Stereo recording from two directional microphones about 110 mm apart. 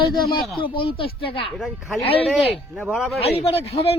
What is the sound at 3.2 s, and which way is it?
Speech, 65° left (ahead or behind).